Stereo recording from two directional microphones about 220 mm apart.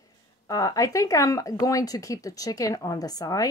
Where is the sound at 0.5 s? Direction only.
15° left (ahead or behind).